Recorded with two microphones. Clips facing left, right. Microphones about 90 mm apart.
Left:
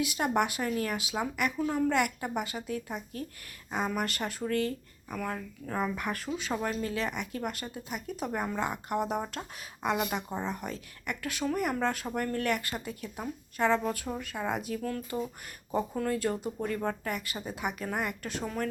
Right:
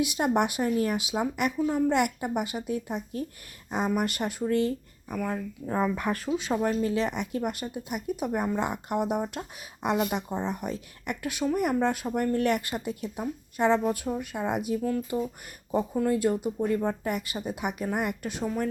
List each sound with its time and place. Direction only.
0.0 s a woman's voice: 20° right (ahead or behind)
1.5 s speech: 10° right (ahead or behind)
1.9 s a woman's voice: 20° right (ahead or behind)
5.0 s speech: 10° right (ahead or behind)
5.3 s a woman's voice: 20° right (ahead or behind)